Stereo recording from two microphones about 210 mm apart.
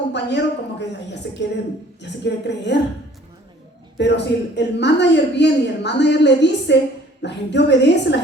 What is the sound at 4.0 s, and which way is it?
A woman's voice, 55° left (ahead or behind).